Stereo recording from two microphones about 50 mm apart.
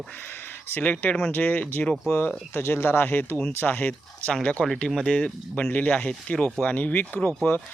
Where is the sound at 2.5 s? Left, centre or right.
Left.